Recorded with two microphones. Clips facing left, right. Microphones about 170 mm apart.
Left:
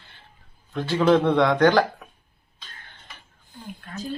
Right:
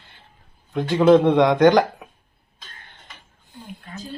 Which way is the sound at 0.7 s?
15° right (ahead or behind).